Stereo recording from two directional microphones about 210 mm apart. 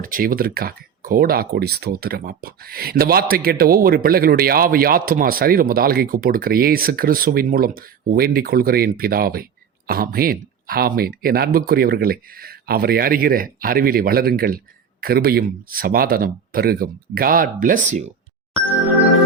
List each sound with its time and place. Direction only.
0.0 s speech: 40° right (ahead or behind)